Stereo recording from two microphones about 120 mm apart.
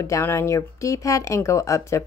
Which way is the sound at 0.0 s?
25° left (ahead or behind).